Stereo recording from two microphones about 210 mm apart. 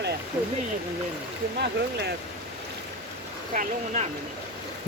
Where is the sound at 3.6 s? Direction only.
40° right (ahead or behind).